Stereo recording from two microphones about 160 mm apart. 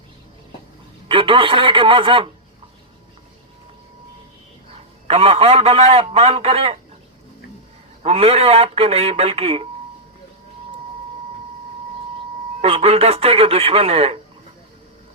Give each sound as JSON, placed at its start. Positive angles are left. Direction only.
{"t": 1.0, "sound": "speech", "side_deg": -35}
{"t": 4.7, "sound": "a man's voice", "side_deg": -40}
{"t": 8.0, "sound": "speech", "side_deg": -40}
{"t": 12.6, "sound": "speech", "side_deg": -35}